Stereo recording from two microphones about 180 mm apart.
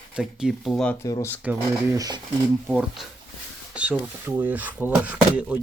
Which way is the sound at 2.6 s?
5° right (ahead or behind).